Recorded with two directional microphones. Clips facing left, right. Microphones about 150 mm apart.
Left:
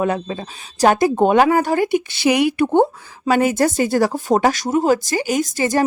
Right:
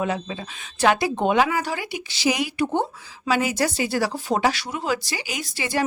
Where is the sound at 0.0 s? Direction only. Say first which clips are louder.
Left 5 dB; 50° left (ahead or behind).